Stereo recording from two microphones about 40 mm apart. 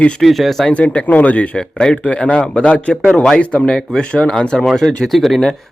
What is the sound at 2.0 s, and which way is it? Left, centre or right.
A man's voice, left.